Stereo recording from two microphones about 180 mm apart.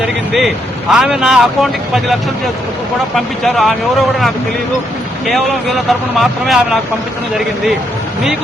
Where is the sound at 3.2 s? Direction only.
Centre (ahead or behind).